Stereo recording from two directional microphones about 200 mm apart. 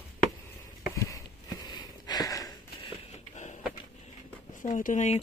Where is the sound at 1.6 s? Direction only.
20° left (ahead or behind).